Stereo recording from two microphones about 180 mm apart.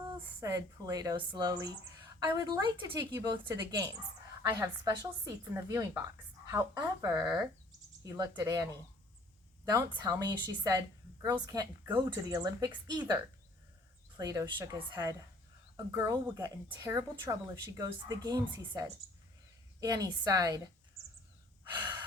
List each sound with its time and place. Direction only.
0.3 s a woman's voice: 20° right (ahead or behind)
14.2 s a woman's voice: 20° right (ahead or behind)